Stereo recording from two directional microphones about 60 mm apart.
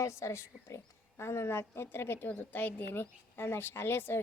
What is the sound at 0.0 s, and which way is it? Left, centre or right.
A woman's voice, left.